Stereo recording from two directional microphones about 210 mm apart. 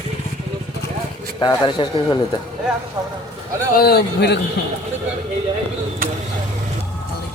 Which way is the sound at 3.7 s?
50° left (ahead or behind).